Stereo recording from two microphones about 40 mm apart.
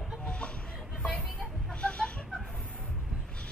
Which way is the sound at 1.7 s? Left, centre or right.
Left.